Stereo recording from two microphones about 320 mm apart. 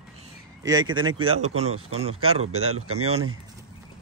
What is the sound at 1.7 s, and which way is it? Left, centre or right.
Speech, right.